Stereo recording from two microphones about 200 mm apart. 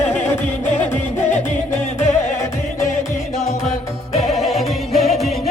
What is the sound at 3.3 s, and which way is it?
Music, 30° left (ahead or behind).